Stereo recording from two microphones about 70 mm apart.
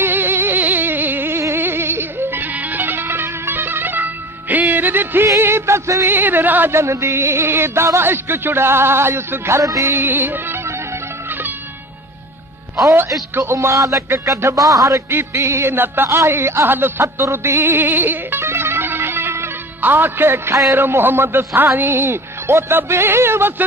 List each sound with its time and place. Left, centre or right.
0.0 s music: right
6.0 s speech: right
6.7 s speech: right
9.6 s speech: right
9.9 s music: right
13.3 s speech: right
15.0 s a man's voice: right